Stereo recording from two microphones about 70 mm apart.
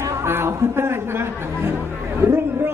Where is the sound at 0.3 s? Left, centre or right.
Right.